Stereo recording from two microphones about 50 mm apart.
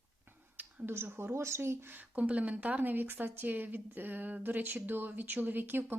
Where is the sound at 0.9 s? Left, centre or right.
Right.